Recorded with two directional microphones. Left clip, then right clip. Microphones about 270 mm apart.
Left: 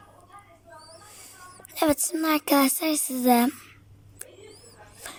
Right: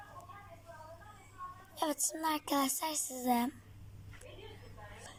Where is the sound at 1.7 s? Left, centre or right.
Left.